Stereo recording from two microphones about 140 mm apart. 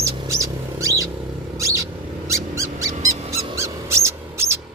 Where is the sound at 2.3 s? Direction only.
20° right (ahead or behind).